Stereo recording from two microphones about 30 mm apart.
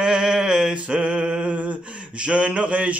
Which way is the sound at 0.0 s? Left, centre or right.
Right.